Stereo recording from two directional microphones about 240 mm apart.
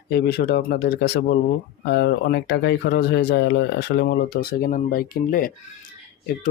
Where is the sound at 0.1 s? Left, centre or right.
Left.